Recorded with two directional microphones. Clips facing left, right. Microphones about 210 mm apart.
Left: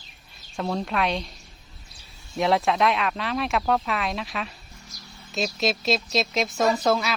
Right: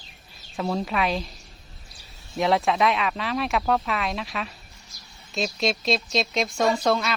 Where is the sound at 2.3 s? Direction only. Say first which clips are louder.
Even; centre (ahead or behind).